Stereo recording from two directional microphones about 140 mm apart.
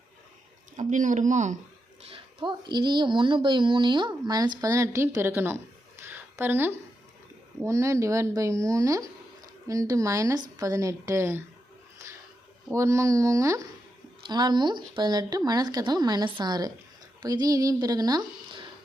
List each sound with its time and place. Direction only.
0.8 s speech: 65° right (ahead or behind)
2.0 s speech: 40° right (ahead or behind); by 5.5 s 15° right (ahead or behind)
6.1 s a sound: 15° right (ahead or behind)
7.6 s speech: 20° right (ahead or behind)
12.7 s speech: 20° right (ahead or behind)